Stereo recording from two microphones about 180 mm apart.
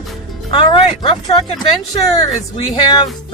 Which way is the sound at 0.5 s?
25° left (ahead or behind).